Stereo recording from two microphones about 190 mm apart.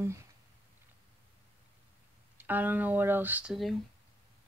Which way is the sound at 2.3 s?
10° right (ahead or behind).